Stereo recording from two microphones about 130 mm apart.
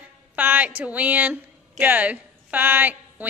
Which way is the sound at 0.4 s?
15° right (ahead or behind).